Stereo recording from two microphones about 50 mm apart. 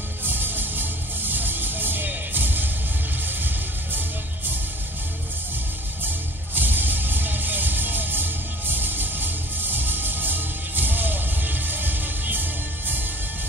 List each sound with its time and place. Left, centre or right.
0.2 s music: right
6.5 s music: right